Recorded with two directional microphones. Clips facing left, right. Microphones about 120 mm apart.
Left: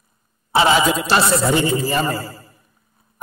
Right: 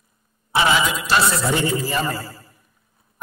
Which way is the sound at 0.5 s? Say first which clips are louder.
Left 4 dB; 30° left (ahead or behind).